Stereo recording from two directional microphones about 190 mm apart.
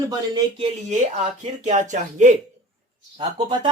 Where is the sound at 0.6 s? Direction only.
35° right (ahead or behind).